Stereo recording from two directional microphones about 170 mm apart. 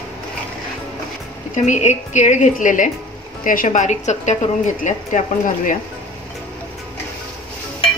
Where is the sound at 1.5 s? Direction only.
45° left (ahead or behind).